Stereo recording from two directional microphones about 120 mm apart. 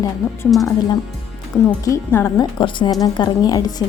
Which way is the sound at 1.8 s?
20° left (ahead or behind).